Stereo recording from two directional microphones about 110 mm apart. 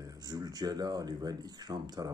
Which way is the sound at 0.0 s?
35° right (ahead or behind).